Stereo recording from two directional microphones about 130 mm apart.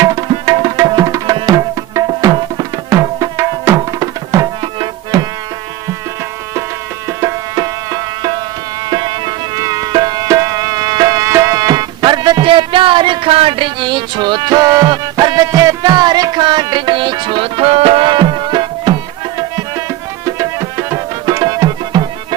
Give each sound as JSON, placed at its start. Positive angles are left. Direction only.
{"t": 0.0, "sound": "tabla", "side_deg": -25}
{"t": 5.1, "sound": "music", "side_deg": -25}
{"t": 7.2, "sound": "music", "side_deg": -25}
{"t": 20.2, "sound": "tabla", "side_deg": -25}